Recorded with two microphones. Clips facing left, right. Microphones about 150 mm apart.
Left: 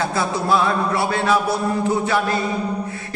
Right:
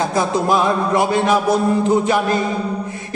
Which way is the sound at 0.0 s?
15° right (ahead or behind).